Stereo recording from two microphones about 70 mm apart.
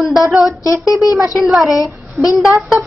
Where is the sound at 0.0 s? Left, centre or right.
Centre.